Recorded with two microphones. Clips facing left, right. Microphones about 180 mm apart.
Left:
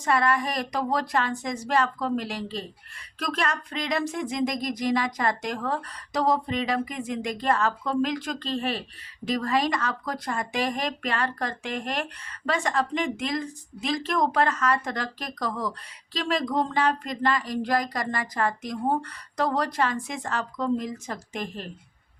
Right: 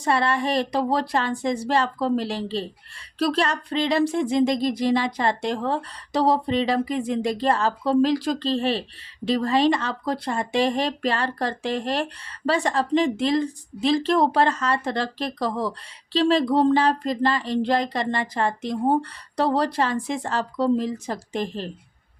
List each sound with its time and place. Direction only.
0.0 s speech: 30° right (ahead or behind)